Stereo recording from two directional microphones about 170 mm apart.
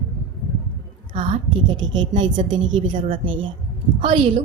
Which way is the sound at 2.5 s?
90° right.